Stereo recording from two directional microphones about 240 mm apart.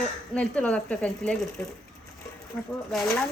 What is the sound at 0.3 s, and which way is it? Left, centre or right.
Speech, centre.